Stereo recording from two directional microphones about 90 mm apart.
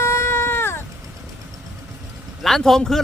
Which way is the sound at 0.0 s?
30° left (ahead or behind).